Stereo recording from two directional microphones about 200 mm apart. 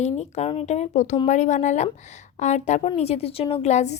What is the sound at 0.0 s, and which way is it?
A woman's voice, 35° left (ahead or behind).